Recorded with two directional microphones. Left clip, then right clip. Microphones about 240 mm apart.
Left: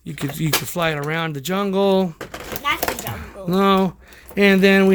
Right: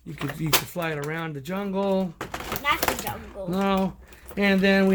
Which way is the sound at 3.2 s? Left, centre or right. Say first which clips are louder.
Left 8 dB; left.